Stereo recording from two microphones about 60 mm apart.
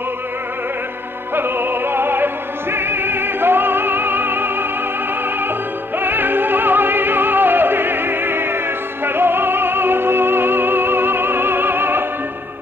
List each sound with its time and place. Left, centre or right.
1.3 s opera: right
5.9 s music: right